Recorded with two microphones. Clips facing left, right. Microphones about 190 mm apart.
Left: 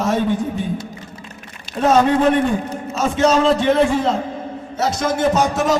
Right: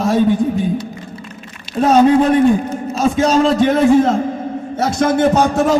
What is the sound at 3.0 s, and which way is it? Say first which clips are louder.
A man's voice: right 2 dB; 35° right (ahead or behind).